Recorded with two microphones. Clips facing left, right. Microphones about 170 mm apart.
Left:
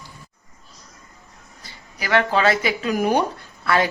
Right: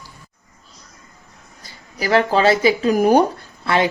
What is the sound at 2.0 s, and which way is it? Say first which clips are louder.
A woman's voice: right 3 dB; 35° right (ahead or behind).